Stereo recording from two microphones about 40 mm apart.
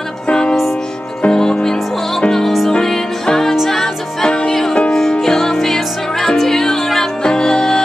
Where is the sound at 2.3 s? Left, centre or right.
Centre.